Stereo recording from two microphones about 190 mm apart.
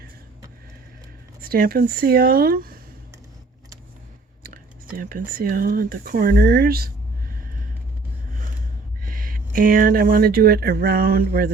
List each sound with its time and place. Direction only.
1.4 s speech: 50° right (ahead or behind)
4.4 s speech: 50° right (ahead or behind)
9.0 s speech: 50° right (ahead or behind)